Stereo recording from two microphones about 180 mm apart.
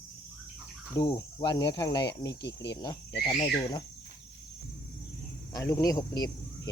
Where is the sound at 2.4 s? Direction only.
75° left (ahead or behind).